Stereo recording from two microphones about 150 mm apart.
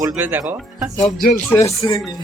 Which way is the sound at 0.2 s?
15° right (ahead or behind).